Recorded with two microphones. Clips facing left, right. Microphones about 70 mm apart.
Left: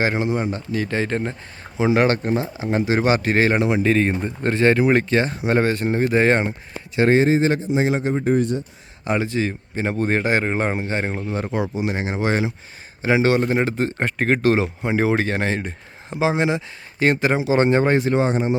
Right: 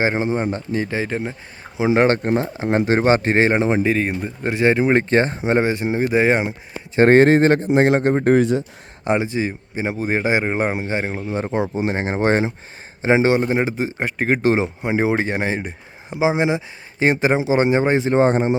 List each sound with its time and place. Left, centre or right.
0.0 s speech: right
0.9 s speech: centre
1.8 s speech: right
3.8 s speech: centre
6.9 s speech: right
7.2 s speech: right
9.0 s speech: right
11.3 s speech: right
14.4 s speech: right
18.1 s speech: right